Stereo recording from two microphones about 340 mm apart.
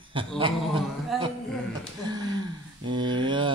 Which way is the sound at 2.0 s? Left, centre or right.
Centre.